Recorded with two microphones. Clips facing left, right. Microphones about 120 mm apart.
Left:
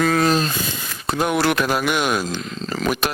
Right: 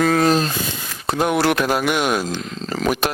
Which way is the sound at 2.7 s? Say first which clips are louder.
Right 2 dB; 45° right (ahead or behind).